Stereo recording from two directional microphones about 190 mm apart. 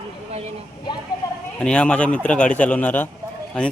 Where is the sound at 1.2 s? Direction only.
15° left (ahead or behind).